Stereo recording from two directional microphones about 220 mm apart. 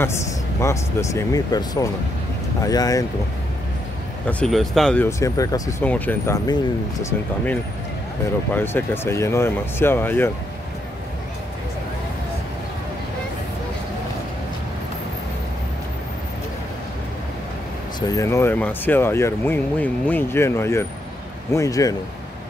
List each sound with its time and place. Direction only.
0.0 s speech: 10° left (ahead or behind)
4.3 s speech: 5° left (ahead or behind)
18.1 s speech: 10° left (ahead or behind)